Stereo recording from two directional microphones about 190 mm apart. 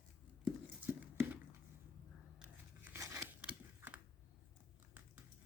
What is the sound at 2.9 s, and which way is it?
Scissors, 15° right (ahead or behind).